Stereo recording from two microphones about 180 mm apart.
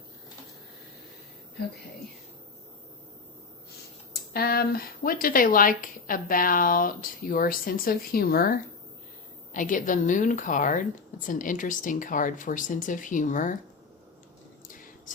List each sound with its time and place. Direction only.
4.1 s speech: 60° left (ahead or behind)
14.7 s whispering: 50° left (ahead or behind)